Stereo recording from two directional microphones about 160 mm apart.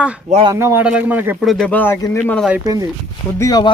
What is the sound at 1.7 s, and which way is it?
Speech, 10° left (ahead or behind).